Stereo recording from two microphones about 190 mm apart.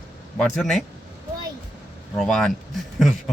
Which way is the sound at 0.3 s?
Centre (ahead or behind).